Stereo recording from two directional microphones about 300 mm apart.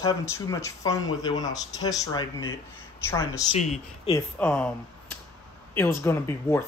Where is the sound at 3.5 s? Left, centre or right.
Left.